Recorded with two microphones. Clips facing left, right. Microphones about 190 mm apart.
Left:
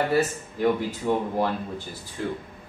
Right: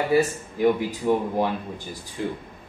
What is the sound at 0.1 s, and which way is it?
Speech, 10° right (ahead or behind).